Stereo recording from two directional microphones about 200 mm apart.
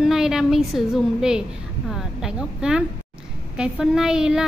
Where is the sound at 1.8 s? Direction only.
Centre (ahead or behind).